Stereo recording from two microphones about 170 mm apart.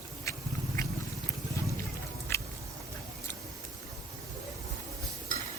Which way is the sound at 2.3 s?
15° left (ahead or behind).